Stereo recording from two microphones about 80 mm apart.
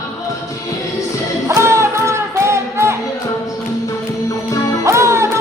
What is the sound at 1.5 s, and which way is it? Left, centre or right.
Music, right.